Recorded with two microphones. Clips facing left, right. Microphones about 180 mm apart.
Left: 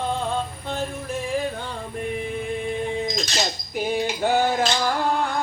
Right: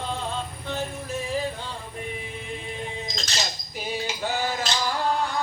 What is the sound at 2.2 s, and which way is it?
Music, 55° left (ahead or behind).